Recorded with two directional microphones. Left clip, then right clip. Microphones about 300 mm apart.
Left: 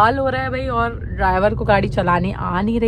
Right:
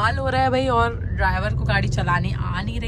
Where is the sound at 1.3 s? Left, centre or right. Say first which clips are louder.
Left 9 dB; centre.